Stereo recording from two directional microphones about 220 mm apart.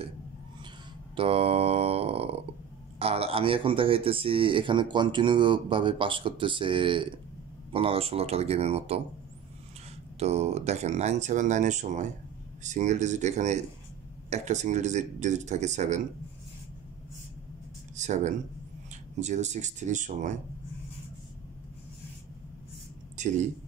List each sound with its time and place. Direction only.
1.1 s mantra: 25° right (ahead or behind)
3.0 s speech: 25° right (ahead or behind)
10.1 s speech: 30° right (ahead or behind)
17.9 s speech: 30° right (ahead or behind)
23.1 s speech: 35° right (ahead or behind)